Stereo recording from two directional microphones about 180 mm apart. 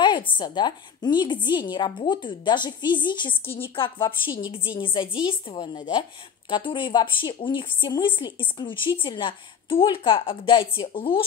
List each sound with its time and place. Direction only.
0.0 s a woman's voice: 25° left (ahead or behind)